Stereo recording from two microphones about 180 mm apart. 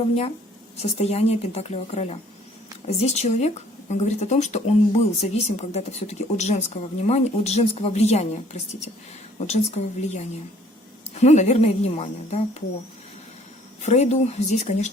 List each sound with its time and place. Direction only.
0.0 s speech: 35° left (ahead or behind)
9.5 s speech: 40° left (ahead or behind)
13.8 s speech: 40° left (ahead or behind)